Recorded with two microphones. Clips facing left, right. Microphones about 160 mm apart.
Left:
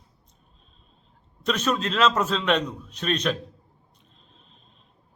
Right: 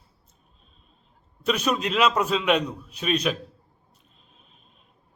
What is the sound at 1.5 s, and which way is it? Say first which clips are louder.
A man's voice: right 1 dB; 10° right (ahead or behind).